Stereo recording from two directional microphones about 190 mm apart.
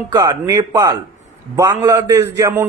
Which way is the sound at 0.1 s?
25° right (ahead or behind).